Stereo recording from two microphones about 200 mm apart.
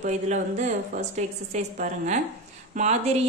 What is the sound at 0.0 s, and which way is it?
A woman's voice, 35° right (ahead or behind).